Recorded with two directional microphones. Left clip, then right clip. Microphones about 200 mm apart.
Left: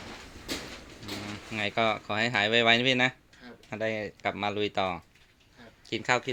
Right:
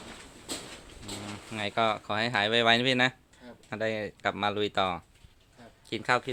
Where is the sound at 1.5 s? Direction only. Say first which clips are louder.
Even; 5° left (ahead or behind).